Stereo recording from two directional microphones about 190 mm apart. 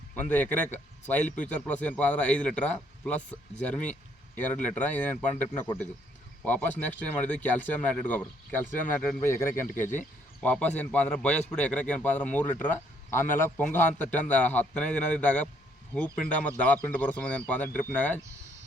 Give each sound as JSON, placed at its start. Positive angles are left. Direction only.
{"t": 0.2, "sound": "a man's voice", "side_deg": 10}
{"t": 6.4, "sound": "a man's voice", "side_deg": 10}